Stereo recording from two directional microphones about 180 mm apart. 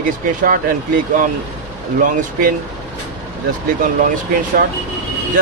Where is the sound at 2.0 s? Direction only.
50° right (ahead or behind).